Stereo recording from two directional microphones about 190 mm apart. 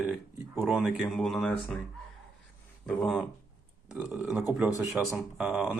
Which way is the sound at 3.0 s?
Centre (ahead or behind).